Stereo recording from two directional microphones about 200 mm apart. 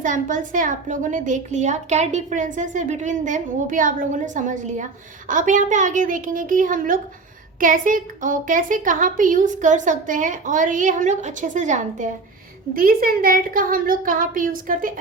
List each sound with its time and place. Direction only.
0.0 s a child's voice: 40° right (ahead or behind)